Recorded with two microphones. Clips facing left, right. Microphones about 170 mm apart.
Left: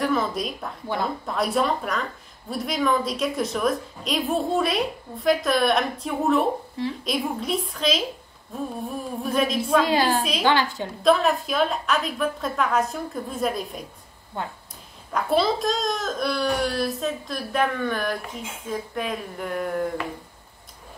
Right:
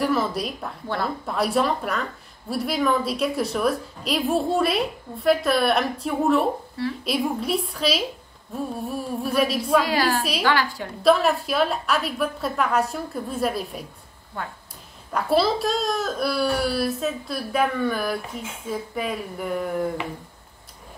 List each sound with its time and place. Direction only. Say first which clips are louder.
0.0 s a woman's voice: right 1 dB; 5° right (ahead or behind)
9.8 s a woman's voice: left 1 dB; 25° left (ahead or behind)
11.0 s a woman's voice: right 1 dB; 5° right (ahead or behind)
14.3 s a woman's voice: left 2 dB; 25° left (ahead or behind)
15.1 s a woman's voice: right 1 dB; 5° right (ahead or behind)